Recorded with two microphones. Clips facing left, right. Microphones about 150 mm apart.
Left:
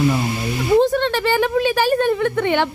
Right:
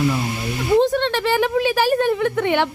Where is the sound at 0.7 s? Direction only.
Centre (ahead or behind).